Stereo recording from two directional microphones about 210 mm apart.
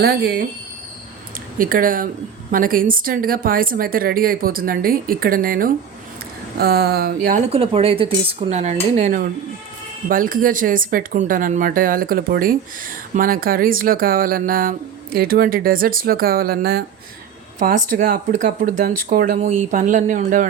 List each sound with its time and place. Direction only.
0.0 s speech: 50° right (ahead or behind)
1.5 s speech: 40° right (ahead or behind)
7.5 s speech: 25° right (ahead or behind)